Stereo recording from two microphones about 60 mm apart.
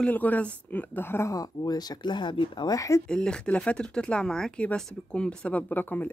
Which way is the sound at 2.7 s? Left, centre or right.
Left.